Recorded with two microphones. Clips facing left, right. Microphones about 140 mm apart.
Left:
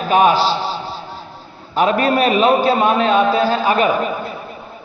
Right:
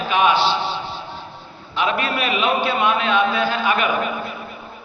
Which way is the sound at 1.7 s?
40° left (ahead or behind).